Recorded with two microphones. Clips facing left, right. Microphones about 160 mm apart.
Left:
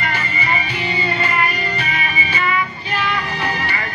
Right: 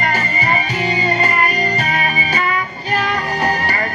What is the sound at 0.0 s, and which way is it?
Music, 45° right (ahead or behind).